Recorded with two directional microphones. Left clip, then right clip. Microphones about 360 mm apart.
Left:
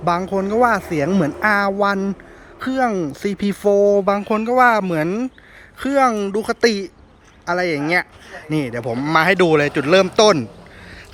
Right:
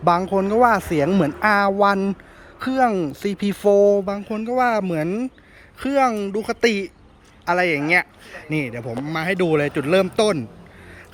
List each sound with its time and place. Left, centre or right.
0.0 s speech: centre
3.2 s speech: centre